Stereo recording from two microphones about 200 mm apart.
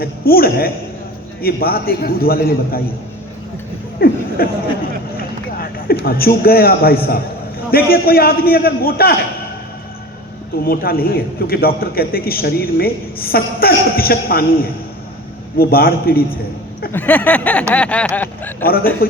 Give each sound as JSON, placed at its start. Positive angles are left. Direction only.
{"t": 0.0, "sound": "a man's voice", "side_deg": 50}
{"t": 4.0, "sound": "a sound", "side_deg": 50}
{"t": 4.4, "sound": "a man's voice", "side_deg": 50}
{"t": 5.5, "sound": "a sound", "side_deg": 50}
{"t": 6.1, "sound": "a man's voice", "side_deg": 50}
{"t": 10.6, "sound": "a man's voice", "side_deg": 50}
{"t": 16.9, "sound": "speech", "side_deg": 10}